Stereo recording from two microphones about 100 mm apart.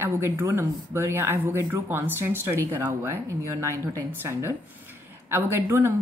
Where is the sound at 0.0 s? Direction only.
25° right (ahead or behind).